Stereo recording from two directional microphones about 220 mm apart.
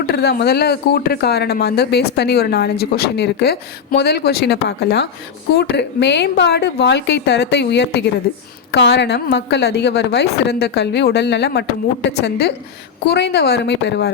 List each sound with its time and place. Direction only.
0.1 s speech: 45° left (ahead or behind)